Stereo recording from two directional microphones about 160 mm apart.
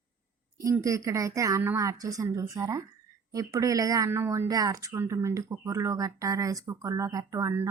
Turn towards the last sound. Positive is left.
turn(degrees=-20)  # may be behind; listen again after turning